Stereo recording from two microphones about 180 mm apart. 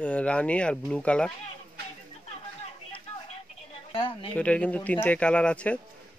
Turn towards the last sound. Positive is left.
turn(degrees=5)  # may be behind; listen again after turning